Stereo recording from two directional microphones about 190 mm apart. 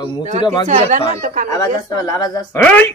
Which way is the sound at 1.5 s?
20° left (ahead or behind).